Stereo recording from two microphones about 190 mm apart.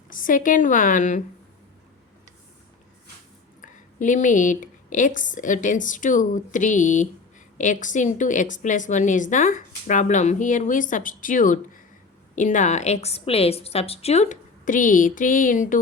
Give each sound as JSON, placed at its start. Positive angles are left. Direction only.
{"t": 0.1, "sound": "a woman's voice", "side_deg": 45}
{"t": 3.6, "sound": "speech", "side_deg": 40}